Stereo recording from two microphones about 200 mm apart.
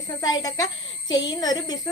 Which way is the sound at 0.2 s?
20° left (ahead or behind).